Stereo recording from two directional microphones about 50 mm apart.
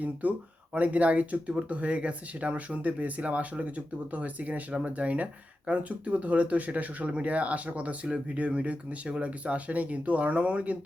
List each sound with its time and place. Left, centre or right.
0.0 s speech: right